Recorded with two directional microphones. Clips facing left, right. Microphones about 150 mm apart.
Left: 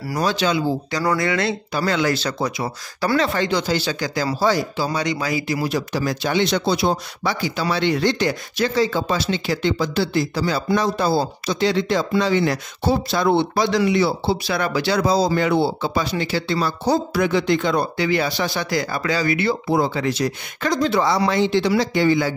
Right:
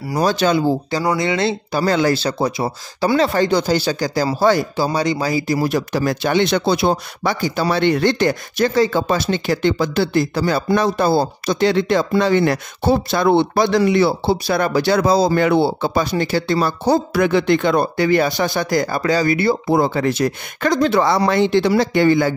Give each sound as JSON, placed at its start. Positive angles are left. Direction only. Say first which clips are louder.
{"t": 0.2, "sound": "speech", "louder": "right 4 dB", "side_deg": -45}
{"t": 0.9, "sound": "speech", "louder": "right 2 dB", "side_deg": -20}
{"t": 3.2, "sound": "speech", "louder": "right 5 dB", "side_deg": -40}
{"t": 4.4, "sound": "speech", "louder": "right 4 dB", "side_deg": -55}
{"t": 4.8, "sound": "speech", "louder": "right 4 dB", "side_deg": -35}
{"t": 19.8, "sound": "speech", "louder": "right 3 dB", "side_deg": -50}